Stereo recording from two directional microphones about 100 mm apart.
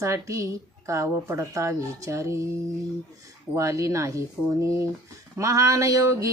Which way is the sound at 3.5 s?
30° right (ahead or behind).